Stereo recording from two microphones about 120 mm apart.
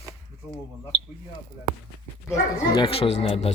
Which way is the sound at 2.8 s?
55° left (ahead or behind).